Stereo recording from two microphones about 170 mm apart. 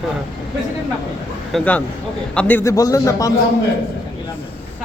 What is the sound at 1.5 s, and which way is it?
A man's voice, 10° left (ahead or behind).